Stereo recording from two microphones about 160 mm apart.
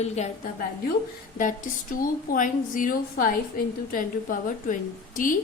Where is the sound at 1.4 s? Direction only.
55° left (ahead or behind).